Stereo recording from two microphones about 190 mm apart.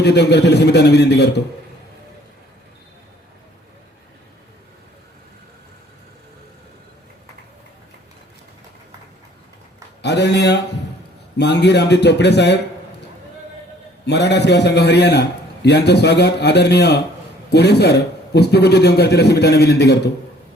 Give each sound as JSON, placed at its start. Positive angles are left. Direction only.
{"t": 0.0, "sound": "a man's voice", "side_deg": 60}
{"t": 10.0, "sound": "a man's voice", "side_deg": 65}
{"t": 14.0, "sound": "a man's voice", "side_deg": 60}